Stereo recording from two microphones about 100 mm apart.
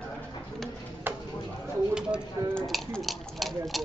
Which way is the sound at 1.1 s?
20° right (ahead or behind).